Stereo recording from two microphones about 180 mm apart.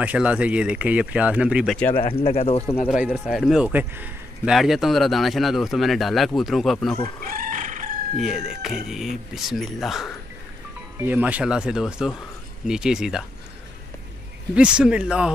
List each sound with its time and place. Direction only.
0.0 s speech: 5° right (ahead or behind)
2.0 s speech: 30° left (ahead or behind)
2.9 s a man's voice: 5° right (ahead or behind)
7.2 s chicken: 50° right (ahead or behind)
8.2 s a man's voice: 5° right (ahead or behind)
14.5 s a man's voice: 5° right (ahead or behind)